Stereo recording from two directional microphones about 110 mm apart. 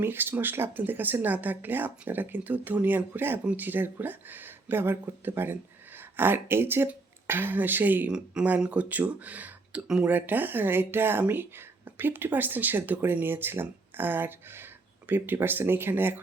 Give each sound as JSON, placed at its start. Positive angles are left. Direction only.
{"t": 0.0, "sound": "speech", "side_deg": -20}